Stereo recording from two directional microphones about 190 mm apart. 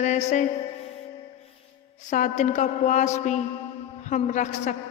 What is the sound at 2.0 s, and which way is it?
A woman's voice, 40° left (ahead or behind).